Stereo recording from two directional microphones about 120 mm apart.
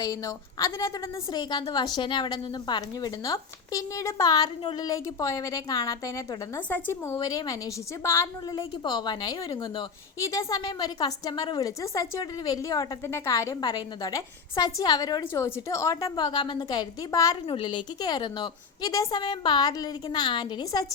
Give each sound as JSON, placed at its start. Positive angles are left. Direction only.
{"t": 0.0, "sound": "a woman's voice", "side_deg": 30}
{"t": 6.7, "sound": "a woman's voice", "side_deg": 20}
{"t": 7.2, "sound": "a woman's voice", "side_deg": 35}
{"t": 15.2, "sound": "a woman's voice", "side_deg": 20}
{"t": 16.0, "sound": "a woman's voice", "side_deg": 40}
{"t": 17.5, "sound": "a woman's voice", "side_deg": 40}
{"t": 19.2, "sound": "a woman's voice", "side_deg": 45}